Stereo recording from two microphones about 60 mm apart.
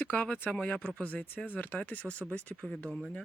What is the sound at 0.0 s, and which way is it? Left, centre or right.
Speech, left.